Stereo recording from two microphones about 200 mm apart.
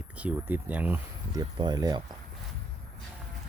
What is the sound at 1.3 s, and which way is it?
Speech, 20° right (ahead or behind).